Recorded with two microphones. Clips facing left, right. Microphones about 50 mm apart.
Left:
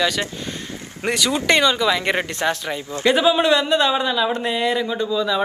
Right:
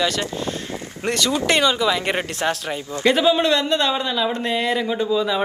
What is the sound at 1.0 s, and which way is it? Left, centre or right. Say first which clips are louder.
Speech: left 1 dB; centre.